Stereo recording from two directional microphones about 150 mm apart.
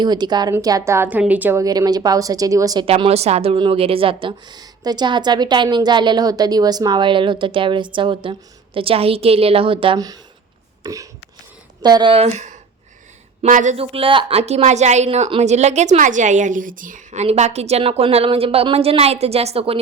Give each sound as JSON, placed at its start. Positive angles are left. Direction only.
{"t": 0.0, "sound": "a woman's voice", "side_deg": -30}
{"t": 1.0, "sound": "a woman's voice", "side_deg": -10}
{"t": 2.8, "sound": "a woman's voice", "side_deg": -40}
{"t": 10.8, "sound": "a woman's voice", "side_deg": -20}
{"t": 13.7, "sound": "a woman's voice", "side_deg": -40}